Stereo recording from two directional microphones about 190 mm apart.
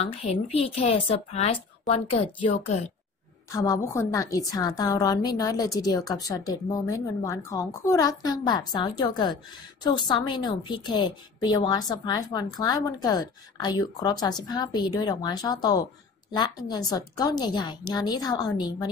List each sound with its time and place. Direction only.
0.0 s a woman's voice: 30° left (ahead or behind)
3.5 s a woman's voice: 15° left (ahead or behind)